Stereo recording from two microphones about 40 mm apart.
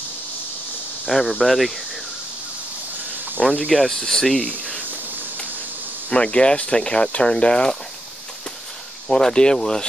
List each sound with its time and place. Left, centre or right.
1.0 s speech: centre
3.4 s speech: left
3.7 s speech: centre
4.4 s speech: left
6.0 s speech: left
9.1 s speech: left